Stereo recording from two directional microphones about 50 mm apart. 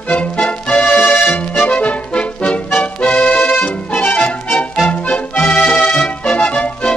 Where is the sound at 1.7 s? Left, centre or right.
Left.